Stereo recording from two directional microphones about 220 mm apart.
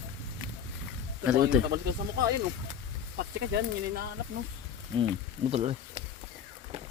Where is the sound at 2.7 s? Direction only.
45° right (ahead or behind).